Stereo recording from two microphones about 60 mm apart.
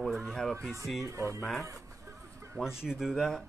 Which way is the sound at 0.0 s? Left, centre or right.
Centre.